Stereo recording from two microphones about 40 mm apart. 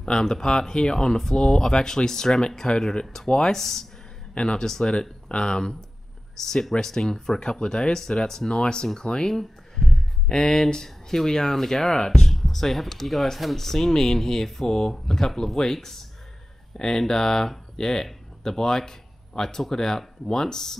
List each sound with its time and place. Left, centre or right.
0.0 s speech: centre
3.5 s speech: centre
4.3 s speech: left
4.6 s speech: centre
5.3 s speech: left